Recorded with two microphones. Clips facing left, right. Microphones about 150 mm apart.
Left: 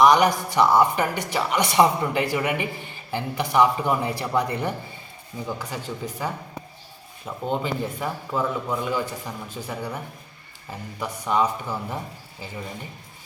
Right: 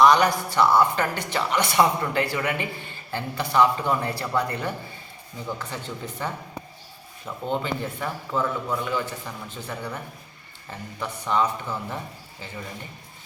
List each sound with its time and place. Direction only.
0.0 s a woman's voice: 15° left (ahead or behind)